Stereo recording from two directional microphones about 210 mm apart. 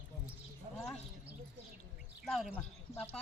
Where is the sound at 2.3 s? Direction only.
Centre (ahead or behind).